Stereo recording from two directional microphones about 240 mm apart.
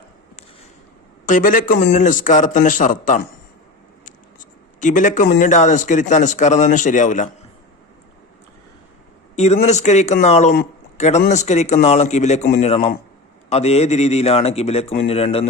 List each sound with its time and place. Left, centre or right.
1.2 s speech: left
9.3 s a man's voice: left